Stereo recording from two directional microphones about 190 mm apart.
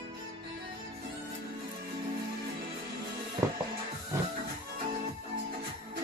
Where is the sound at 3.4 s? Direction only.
15° right (ahead or behind).